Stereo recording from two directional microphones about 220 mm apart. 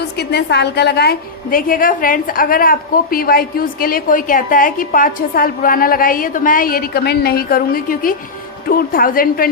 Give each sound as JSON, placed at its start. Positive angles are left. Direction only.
{"t": 0.2, "sound": "a woman's voice", "side_deg": 45}